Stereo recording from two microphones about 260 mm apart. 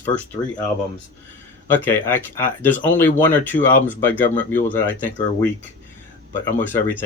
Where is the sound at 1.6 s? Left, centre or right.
Centre.